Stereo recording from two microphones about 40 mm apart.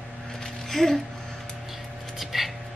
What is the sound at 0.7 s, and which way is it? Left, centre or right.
Speech, centre.